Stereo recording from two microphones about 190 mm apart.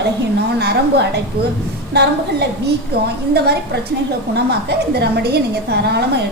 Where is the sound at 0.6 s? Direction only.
60° right (ahead or behind).